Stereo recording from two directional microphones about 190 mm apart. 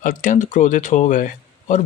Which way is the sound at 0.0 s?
40° left (ahead or behind).